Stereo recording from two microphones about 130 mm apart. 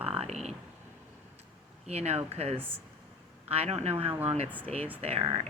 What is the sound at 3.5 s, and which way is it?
Speech, 55° right (ahead or behind).